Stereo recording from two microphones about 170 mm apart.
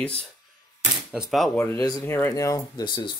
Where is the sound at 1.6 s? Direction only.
20° left (ahead or behind).